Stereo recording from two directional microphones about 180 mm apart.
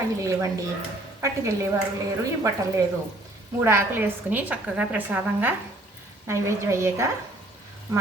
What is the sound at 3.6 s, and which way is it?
A woman's voice, 15° right (ahead or behind).